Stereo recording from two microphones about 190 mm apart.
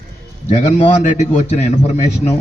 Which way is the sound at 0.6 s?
30° left (ahead or behind).